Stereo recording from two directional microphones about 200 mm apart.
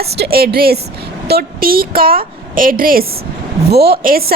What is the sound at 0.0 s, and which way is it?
A woman's voice, 50° right (ahead or behind).